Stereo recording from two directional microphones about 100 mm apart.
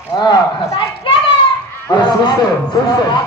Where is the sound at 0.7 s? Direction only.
60° left (ahead or behind).